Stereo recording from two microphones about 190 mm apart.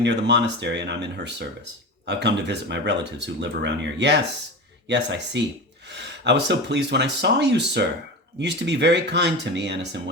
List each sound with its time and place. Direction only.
0.0 s speech: 65° right (ahead or behind)